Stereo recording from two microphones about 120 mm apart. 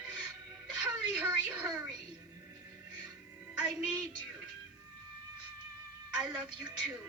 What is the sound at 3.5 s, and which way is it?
Speech, 10° right (ahead or behind).